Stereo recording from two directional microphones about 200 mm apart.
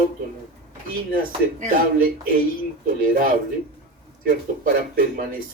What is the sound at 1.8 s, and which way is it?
Speech, 45° right (ahead or behind).